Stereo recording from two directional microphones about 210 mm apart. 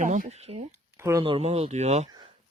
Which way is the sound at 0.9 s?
15° right (ahead or behind).